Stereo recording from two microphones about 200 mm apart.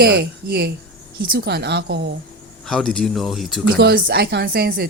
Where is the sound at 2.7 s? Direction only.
5° left (ahead or behind).